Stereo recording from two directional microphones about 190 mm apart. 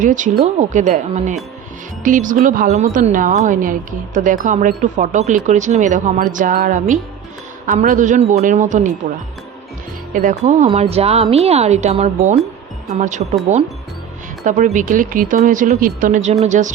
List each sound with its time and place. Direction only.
0.0 s a woman's voice: 45° right (ahead or behind)
10.1 s a woman's voice: 45° right (ahead or behind)
14.4 s a woman's voice: 40° right (ahead or behind)